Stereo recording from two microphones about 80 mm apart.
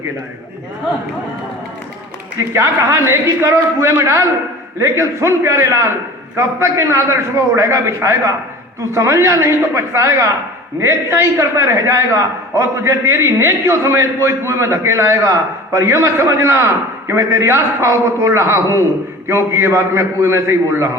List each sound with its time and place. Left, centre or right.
2.4 s a man's voice: right